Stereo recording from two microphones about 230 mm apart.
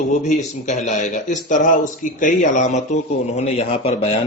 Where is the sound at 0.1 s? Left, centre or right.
Left.